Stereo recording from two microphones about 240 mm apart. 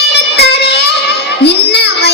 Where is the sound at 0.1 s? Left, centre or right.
Left.